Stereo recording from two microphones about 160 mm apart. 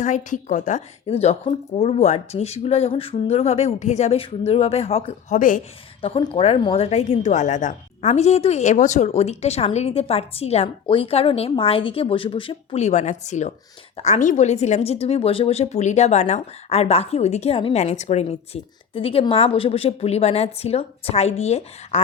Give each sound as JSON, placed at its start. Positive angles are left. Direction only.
{"t": 0.0, "sound": "a woman's voice", "side_deg": 50}
{"t": 5.3, "sound": "a woman's voice", "side_deg": 55}
{"t": 6.0, "sound": "a woman's voice", "side_deg": 35}